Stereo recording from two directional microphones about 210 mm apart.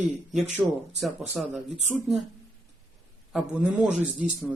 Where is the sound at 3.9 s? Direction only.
35° right (ahead or behind).